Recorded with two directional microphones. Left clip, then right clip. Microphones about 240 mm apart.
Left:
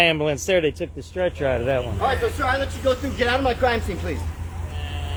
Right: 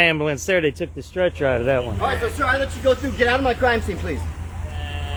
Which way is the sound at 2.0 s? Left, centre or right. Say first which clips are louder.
Even; right.